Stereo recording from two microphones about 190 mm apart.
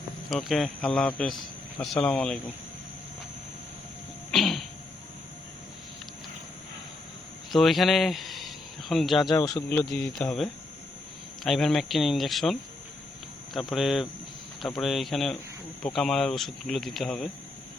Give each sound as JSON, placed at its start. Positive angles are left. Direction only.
{"t": 0.3, "sound": "speech", "side_deg": 0}
{"t": 4.3, "sound": "a sound", "side_deg": 0}
{"t": 7.5, "sound": "speech", "side_deg": 0}
{"t": 9.3, "sound": "speech", "side_deg": 20}
{"t": 9.6, "sound": "speech", "side_deg": 5}